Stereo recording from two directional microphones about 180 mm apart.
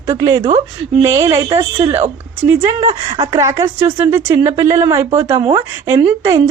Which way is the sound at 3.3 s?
15° right (ahead or behind).